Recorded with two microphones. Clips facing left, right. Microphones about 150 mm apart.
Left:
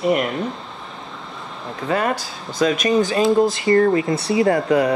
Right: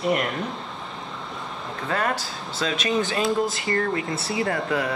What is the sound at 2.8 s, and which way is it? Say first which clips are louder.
Speech: left 6 dB; 40° left (ahead or behind).